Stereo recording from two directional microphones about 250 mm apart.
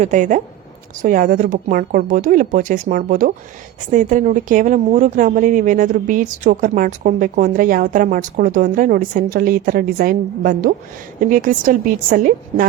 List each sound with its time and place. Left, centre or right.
0.0 s speech: right